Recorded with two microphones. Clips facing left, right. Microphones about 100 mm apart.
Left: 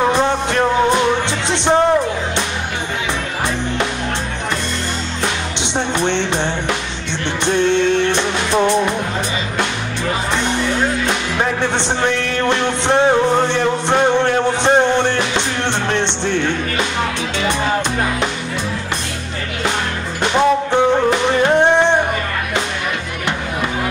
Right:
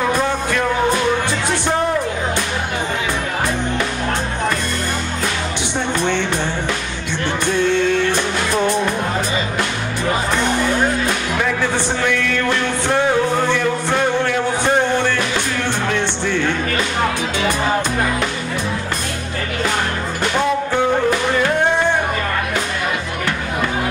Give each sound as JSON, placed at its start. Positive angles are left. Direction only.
{"t": 0.0, "sound": "music", "side_deg": 25}
{"t": 6.0, "sound": "music", "side_deg": 25}
{"t": 8.1, "sound": "music", "side_deg": 20}
{"t": 12.0, "sound": "music", "side_deg": 25}
{"t": 20.3, "sound": "music", "side_deg": 20}